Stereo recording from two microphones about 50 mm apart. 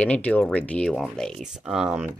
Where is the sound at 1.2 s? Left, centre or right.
Centre.